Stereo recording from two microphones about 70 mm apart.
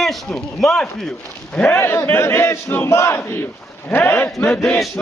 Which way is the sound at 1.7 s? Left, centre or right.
Left.